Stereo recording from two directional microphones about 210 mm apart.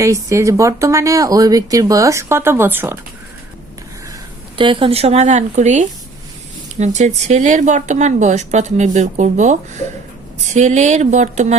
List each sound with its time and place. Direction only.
0.0 s speech: 15° right (ahead or behind)
4.5 s speech: 25° right (ahead or behind)